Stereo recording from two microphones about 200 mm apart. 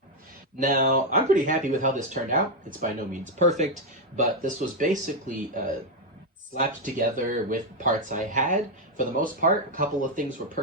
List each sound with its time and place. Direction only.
0.6 s speech: 45° right (ahead or behind)